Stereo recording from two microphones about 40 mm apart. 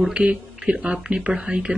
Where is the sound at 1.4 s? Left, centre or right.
Right.